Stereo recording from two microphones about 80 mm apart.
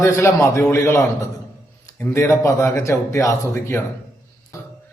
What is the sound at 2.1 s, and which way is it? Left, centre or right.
A man's voice, left.